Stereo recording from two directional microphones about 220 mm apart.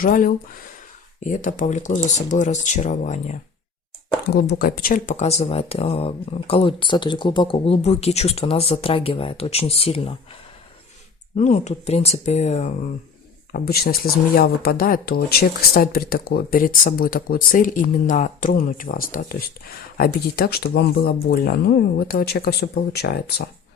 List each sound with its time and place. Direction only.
0.0 s speech: 40° left (ahead or behind)
4.3 s speech: 45° left (ahead or behind); by 10.2 s 25° left (ahead or behind)
11.3 s speech: 30° left (ahead or behind)
13.5 s speech: 45° left (ahead or behind)